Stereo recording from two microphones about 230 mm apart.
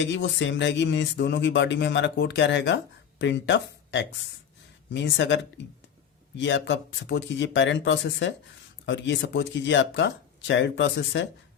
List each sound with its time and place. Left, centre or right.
0.0 s speech: left